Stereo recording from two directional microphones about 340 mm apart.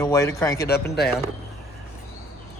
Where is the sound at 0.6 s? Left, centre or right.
Left.